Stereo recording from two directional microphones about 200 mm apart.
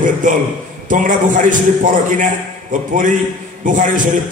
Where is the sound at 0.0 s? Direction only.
40° right (ahead or behind).